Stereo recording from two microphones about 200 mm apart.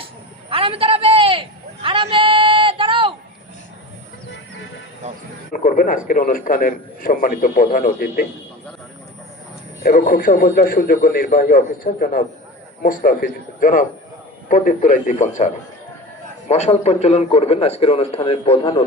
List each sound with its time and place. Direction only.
0.5 s a sound: 25° right (ahead or behind)
5.6 s a man's voice: 45° left (ahead or behind)
9.8 s a man's voice: 45° left (ahead or behind); by 18.8 s 25° left (ahead or behind)